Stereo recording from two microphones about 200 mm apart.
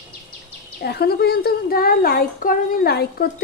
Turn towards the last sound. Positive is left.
turn(degrees=50)  # may be behind; listen again after turning